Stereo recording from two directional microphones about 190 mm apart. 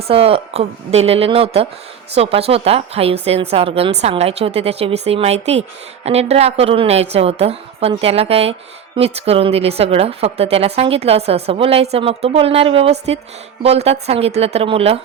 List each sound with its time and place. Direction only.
0.1 s a woman's voice: 30° right (ahead or behind)